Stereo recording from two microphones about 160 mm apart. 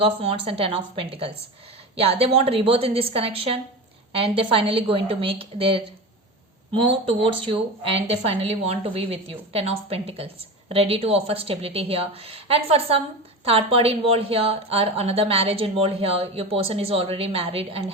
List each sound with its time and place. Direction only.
0.0 s a woman's voice: 35° right (ahead or behind)